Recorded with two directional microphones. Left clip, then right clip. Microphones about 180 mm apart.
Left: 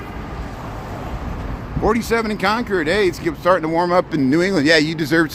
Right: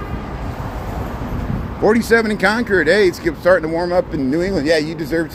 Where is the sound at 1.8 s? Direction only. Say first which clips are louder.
Right 4 dB; 10° left (ahead or behind).